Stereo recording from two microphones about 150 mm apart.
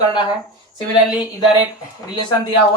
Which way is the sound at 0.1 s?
30° left (ahead or behind).